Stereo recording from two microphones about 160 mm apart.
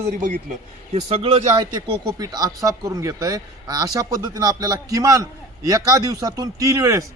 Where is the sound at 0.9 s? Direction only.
40° right (ahead or behind).